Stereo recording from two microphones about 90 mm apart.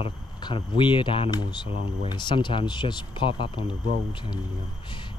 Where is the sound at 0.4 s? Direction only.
60° left (ahead or behind).